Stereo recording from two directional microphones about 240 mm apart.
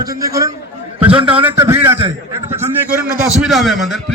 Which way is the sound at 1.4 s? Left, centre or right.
Centre.